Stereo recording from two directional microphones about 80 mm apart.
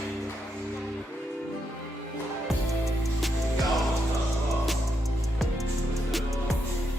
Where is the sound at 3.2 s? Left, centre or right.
Centre.